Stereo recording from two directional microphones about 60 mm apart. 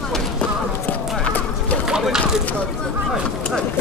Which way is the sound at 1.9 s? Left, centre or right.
Centre.